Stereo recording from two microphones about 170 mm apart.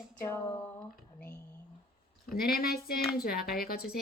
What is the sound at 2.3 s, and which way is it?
Speech, 60° left (ahead or behind).